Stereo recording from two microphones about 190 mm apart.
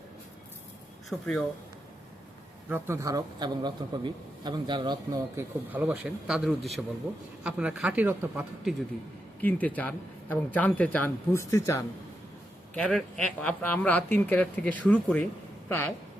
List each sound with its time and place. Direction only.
1.1 s a man's voice: centre (ahead or behind)
2.6 s a man's voice: 10° right (ahead or behind)
5.7 s a man's voice: 10° right (ahead or behind)
9.4 s speech: 10° left (ahead or behind)